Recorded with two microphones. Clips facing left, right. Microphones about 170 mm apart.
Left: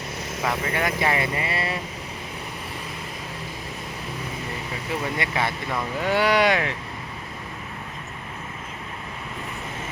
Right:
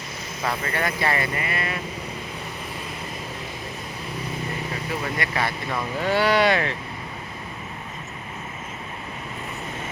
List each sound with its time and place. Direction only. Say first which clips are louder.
0.4 s speech: left 1 dB; 10° left (ahead or behind); by 1.7 s 30° left (ahead or behind)
5.1 s speech: even; 20° left (ahead or behind)